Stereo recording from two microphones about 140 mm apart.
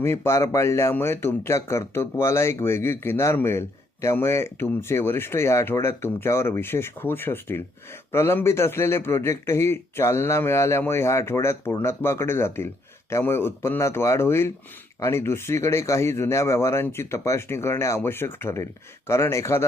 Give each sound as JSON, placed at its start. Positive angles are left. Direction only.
{"t": 0.0, "sound": "a man's voice", "side_deg": 15}